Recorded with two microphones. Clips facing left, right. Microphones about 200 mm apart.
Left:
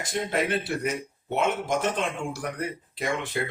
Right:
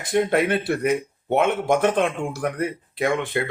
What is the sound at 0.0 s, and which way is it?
Speech, 60° right (ahead or behind).